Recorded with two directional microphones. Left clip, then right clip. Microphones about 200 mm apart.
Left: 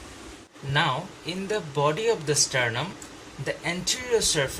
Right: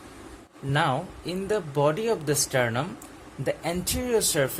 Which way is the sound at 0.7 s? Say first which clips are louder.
Even; 60° right (ahead or behind).